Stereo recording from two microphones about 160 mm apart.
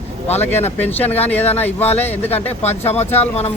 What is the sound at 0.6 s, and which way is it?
Speech, 10° left (ahead or behind).